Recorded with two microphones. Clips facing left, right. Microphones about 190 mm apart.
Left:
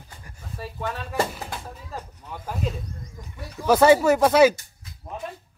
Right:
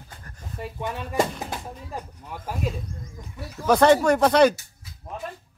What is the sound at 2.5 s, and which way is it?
Speech, centre (ahead or behind).